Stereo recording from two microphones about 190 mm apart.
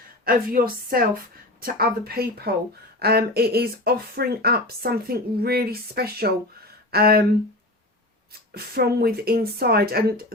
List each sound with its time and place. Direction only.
0.3 s speech: 50° right (ahead or behind)
8.3 s speech: 55° right (ahead or behind)